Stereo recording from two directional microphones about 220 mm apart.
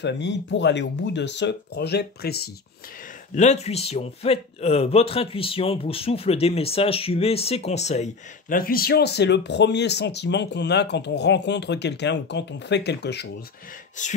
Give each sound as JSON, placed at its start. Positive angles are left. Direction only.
{"t": 0.0, "sound": "speech", "side_deg": 50}
{"t": 3.3, "sound": "a man's voice", "side_deg": 30}
{"t": 14.0, "sound": "a man's voice", "side_deg": 35}